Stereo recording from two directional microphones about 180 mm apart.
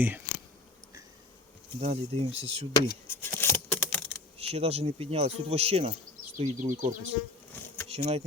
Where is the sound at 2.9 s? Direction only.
15° left (ahead or behind).